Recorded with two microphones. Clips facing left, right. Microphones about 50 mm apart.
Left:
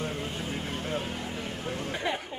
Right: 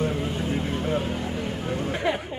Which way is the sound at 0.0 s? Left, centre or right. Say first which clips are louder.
Right 7 dB; centre.